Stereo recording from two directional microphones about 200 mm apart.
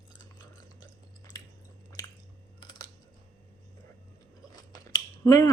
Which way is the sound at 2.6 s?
20° left (ahead or behind).